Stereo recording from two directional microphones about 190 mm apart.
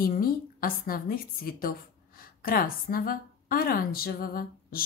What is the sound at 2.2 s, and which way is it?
A woman's voice, 50° left (ahead or behind).